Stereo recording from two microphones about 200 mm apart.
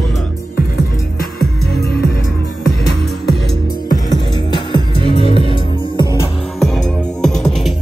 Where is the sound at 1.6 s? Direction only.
50° left (ahead or behind).